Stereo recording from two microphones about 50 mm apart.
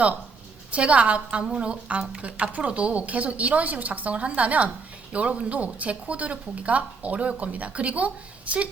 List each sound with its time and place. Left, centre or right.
0.7 s a woman's voice: right